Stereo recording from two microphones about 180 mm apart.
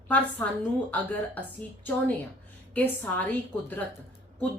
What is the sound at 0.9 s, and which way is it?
A woman's voice, 10° left (ahead or behind).